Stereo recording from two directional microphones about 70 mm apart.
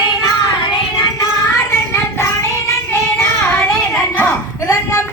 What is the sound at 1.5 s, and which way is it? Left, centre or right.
Child singing, left.